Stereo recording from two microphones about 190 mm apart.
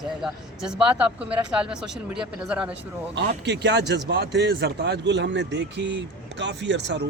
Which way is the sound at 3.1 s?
65° right (ahead or behind).